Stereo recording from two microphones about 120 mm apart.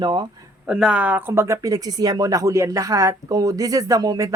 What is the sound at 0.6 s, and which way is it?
Speech, 10° right (ahead or behind).